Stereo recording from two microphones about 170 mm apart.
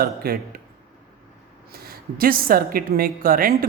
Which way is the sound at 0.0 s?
60° right (ahead or behind).